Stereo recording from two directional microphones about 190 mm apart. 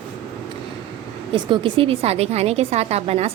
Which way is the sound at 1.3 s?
25° right (ahead or behind).